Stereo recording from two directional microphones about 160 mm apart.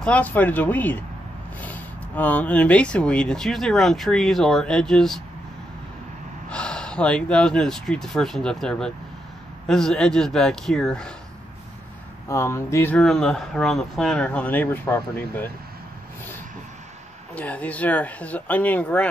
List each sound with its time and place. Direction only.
0.0 s speech: 10° left (ahead or behind)
6.5 s speech: 5° left (ahead or behind)
12.3 s speech: 15° left (ahead or behind)
12.9 s speech: 5° left (ahead or behind)
17.3 s speech: 10° left (ahead or behind)